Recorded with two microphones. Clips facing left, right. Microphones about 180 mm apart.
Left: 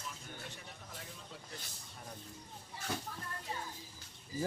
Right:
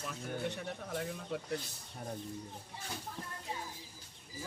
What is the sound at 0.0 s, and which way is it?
Speech, 60° right (ahead or behind).